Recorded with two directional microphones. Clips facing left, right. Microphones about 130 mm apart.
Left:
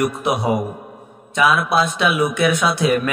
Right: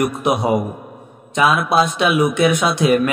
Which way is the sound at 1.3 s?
20° right (ahead or behind).